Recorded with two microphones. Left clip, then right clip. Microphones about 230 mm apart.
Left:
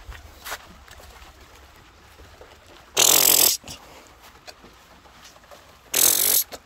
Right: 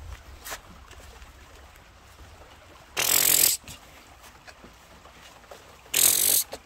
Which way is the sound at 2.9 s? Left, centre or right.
Left.